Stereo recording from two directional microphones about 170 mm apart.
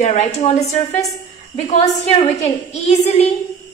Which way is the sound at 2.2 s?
40° left (ahead or behind).